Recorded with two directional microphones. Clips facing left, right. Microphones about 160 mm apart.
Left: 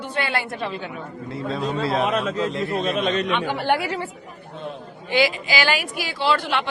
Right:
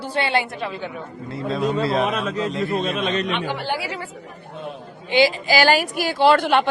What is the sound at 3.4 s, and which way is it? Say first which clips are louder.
Speech: left 3 dB; 45° left (ahead or behind).